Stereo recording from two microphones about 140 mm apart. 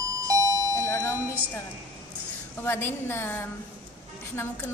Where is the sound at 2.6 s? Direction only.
15° left (ahead or behind).